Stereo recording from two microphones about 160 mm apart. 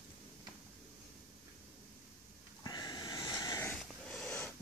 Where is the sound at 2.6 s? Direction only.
25° left (ahead or behind).